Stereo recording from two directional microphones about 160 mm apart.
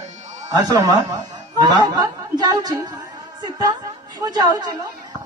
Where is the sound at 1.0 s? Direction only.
25° right (ahead or behind).